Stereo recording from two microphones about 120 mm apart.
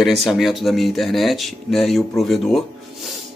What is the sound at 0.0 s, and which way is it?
Speech, centre (ahead or behind).